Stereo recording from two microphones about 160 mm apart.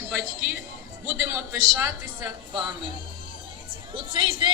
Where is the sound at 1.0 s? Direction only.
15° right (ahead or behind).